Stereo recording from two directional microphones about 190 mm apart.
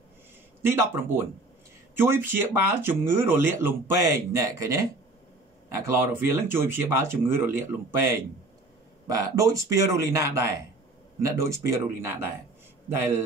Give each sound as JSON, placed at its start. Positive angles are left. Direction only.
{"t": 0.6, "sound": "speech", "side_deg": -15}